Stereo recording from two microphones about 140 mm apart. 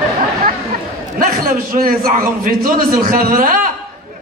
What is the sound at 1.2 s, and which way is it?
A man's voice, 90° right.